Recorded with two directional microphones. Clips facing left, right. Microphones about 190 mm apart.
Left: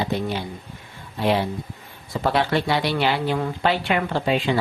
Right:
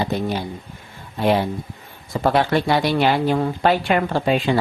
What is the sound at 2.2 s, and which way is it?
Speech, 45° right (ahead or behind).